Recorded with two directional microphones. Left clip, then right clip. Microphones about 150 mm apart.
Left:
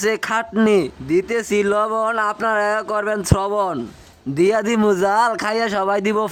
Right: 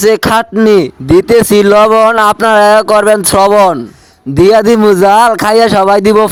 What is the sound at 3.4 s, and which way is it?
Speech, 60° right (ahead or behind).